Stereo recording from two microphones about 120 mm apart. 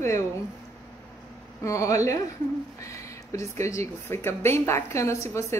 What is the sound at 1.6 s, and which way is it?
Speech, 25° left (ahead or behind).